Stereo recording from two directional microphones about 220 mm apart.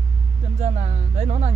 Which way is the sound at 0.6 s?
30° right (ahead or behind).